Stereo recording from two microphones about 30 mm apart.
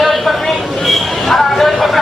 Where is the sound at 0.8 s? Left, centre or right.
Centre.